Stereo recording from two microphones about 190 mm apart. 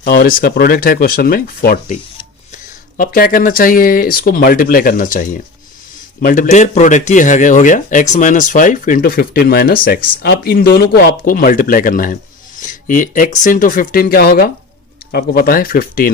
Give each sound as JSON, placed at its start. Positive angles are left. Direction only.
{"t": 0.0, "sound": "speech", "side_deg": 50}
{"t": 3.0, "sound": "speech", "side_deg": 50}